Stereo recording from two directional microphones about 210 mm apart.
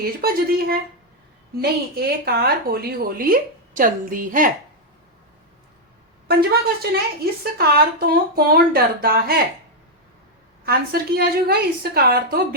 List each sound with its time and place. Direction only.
0.0 s a woman's voice: 45° right (ahead or behind)
6.2 s a woman's voice: 45° right (ahead or behind)
10.7 s a woman's voice: 45° right (ahead or behind)